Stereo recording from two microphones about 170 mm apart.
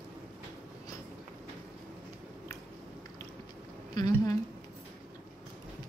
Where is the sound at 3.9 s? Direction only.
20° left (ahead or behind).